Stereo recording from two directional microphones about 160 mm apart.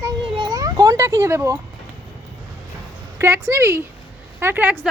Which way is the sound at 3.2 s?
15° right (ahead or behind).